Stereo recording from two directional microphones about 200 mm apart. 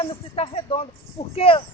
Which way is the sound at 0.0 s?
25° left (ahead or behind).